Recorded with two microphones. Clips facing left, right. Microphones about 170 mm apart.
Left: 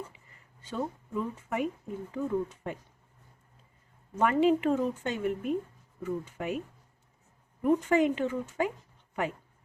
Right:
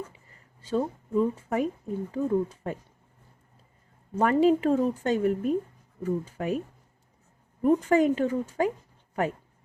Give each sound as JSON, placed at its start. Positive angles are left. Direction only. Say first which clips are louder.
{"t": 0.6, "sound": "a woman's voice", "louder": "right 7 dB", "side_deg": -35}
{"t": 4.1, "sound": "a woman's voice", "louder": "right 3 dB", "side_deg": -35}
{"t": 7.6, "sound": "a woman's voice", "louder": "right 3 dB", "side_deg": -40}